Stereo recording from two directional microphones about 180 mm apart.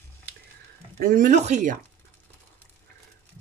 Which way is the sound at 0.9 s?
50° right (ahead or behind).